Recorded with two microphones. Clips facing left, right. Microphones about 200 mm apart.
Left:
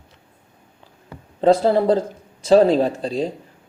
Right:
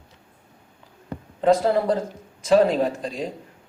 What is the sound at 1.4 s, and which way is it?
A man's voice, 30° left (ahead or behind).